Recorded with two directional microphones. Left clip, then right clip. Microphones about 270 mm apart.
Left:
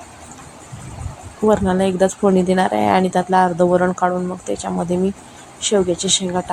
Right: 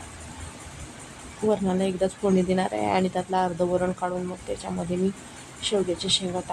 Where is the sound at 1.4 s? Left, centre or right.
Centre.